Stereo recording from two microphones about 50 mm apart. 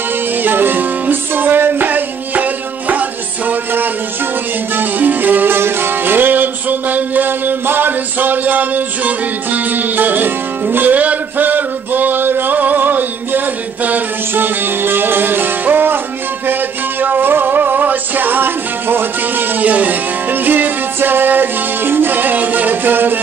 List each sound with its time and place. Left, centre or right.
0.4 s music: right
4.7 s music: right
17.0 s music: right